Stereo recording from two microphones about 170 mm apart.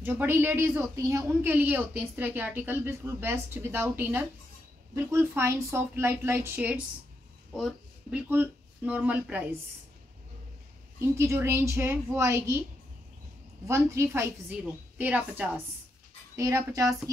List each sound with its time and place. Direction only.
0.0 s speech: 10° right (ahead or behind)
7.5 s speech: centre (ahead or behind)
8.3 s speech: 10° right (ahead or behind)
11.0 s speech: 15° right (ahead or behind)
13.7 s speech: 15° right (ahead or behind)